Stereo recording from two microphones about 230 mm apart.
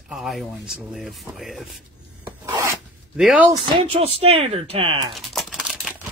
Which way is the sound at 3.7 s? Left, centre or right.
Right.